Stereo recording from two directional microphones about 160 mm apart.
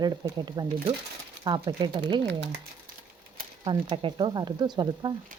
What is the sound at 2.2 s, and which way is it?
Speech, 90° right.